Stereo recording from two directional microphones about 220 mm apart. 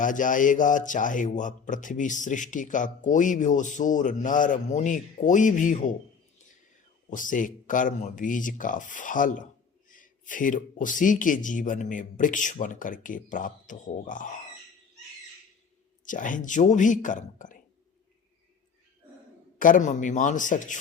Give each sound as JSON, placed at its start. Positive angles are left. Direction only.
{"t": 0.0, "sound": "a man's voice", "side_deg": 35}
{"t": 7.1, "sound": "a man's voice", "side_deg": 35}
{"t": 16.0, "sound": "a man's voice", "side_deg": 35}
{"t": 19.5, "sound": "a man's voice", "side_deg": 40}